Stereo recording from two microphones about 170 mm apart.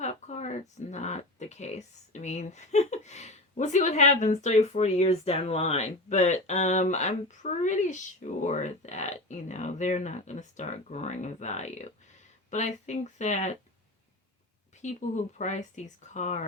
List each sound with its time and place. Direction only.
0.0 s speech: 40° left (ahead or behind)
14.8 s speech: 45° left (ahead or behind)